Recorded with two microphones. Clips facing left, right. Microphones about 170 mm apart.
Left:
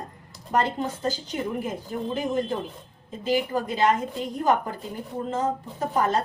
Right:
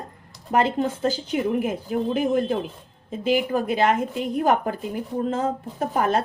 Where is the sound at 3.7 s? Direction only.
70° right (ahead or behind).